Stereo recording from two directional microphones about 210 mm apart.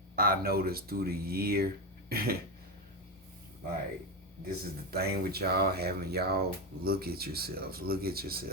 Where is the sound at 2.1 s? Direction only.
45° right (ahead or behind).